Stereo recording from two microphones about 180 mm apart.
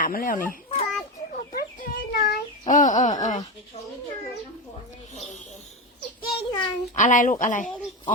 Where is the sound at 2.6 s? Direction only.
45° left (ahead or behind).